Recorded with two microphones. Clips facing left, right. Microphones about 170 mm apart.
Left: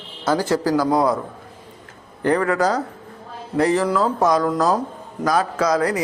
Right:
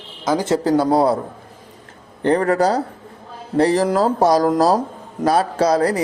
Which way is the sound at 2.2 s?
25° right (ahead or behind).